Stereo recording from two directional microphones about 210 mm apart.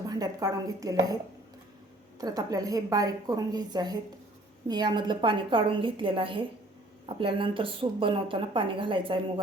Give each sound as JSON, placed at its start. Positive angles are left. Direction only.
{"t": 0.1, "sound": "a woman's voice", "side_deg": -15}
{"t": 2.1, "sound": "a woman's voice", "side_deg": -15}